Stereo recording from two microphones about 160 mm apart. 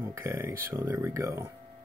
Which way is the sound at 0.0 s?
15° right (ahead or behind).